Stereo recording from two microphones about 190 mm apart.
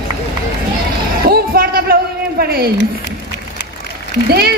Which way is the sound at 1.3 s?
50° right (ahead or behind).